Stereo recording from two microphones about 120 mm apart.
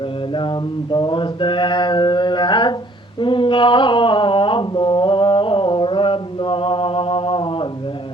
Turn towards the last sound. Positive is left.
turn(degrees=45)  # may be behind; listen again after turning